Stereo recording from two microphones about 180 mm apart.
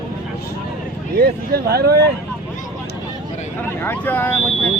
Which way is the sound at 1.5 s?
60° right (ahead or behind).